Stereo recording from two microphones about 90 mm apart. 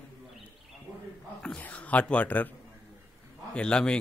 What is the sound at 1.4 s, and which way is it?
A man's voice, 15° left (ahead or behind).